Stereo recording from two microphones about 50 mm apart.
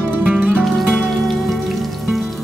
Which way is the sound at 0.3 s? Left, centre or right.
Right.